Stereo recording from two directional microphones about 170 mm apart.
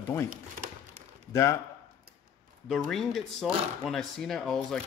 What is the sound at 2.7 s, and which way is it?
Speech, centre (ahead or behind).